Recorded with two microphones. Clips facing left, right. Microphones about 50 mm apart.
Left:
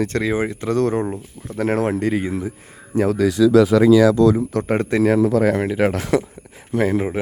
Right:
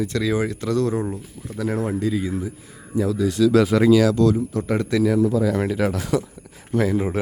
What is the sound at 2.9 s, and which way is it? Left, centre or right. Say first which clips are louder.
Speech: left 4 dB; left.